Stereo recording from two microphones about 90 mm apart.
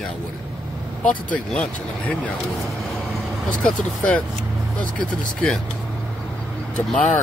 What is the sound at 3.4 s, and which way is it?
Speech, 15° left (ahead or behind).